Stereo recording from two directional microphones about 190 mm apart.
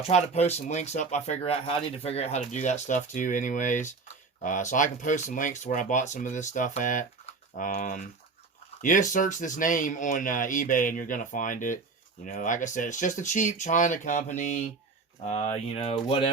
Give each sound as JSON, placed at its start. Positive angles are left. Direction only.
{"t": 0.1, "sound": "speech", "side_deg": 35}